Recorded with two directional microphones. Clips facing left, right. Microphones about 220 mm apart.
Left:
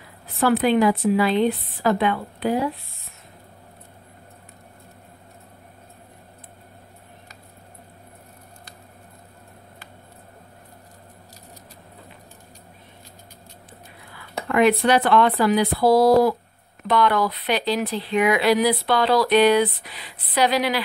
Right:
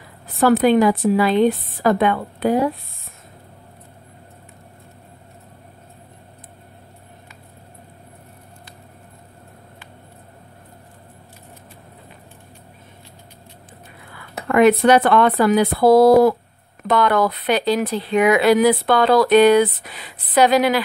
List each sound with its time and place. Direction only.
0.4 s speech: 45° right (ahead or behind)
14.5 s speech: 50° right (ahead or behind)